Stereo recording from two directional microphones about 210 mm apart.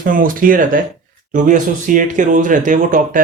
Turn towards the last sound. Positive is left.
turn(degrees=-40)  # may be behind; listen again after turning